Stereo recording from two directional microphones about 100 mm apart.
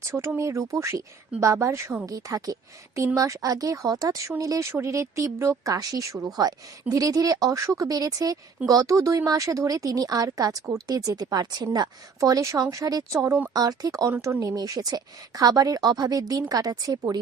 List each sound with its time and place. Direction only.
0.0 s speech: 30° right (ahead or behind)
13.2 s speech: 25° right (ahead or behind)
13.5 s speech: 40° right (ahead or behind)